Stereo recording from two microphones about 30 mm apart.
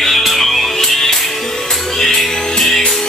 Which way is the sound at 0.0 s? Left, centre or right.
Centre.